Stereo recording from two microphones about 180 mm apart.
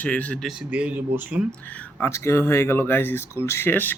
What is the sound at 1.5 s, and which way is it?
Speech, 5° left (ahead or behind).